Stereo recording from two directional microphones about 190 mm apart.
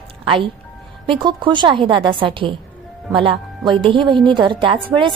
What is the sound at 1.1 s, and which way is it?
A woman's voice, 25° right (ahead or behind).